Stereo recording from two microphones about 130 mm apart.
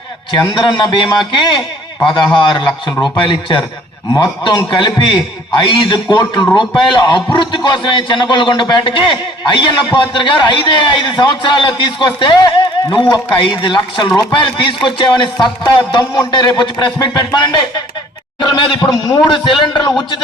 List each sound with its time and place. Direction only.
0.3 s a man's voice: 35° left (ahead or behind)